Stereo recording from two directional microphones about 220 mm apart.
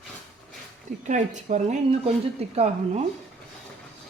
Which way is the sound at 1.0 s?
35° right (ahead or behind).